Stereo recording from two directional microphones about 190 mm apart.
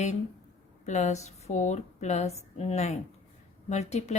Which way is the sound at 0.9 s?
35° left (ahead or behind).